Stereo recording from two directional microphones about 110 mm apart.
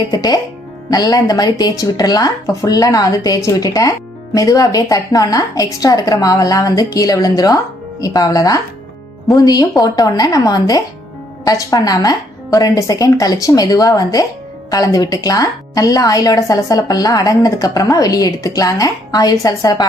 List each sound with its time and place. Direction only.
0.1 s a woman's voice: 35° left (ahead or behind)